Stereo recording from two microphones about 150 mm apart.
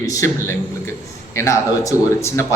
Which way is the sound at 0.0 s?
20° left (ahead or behind).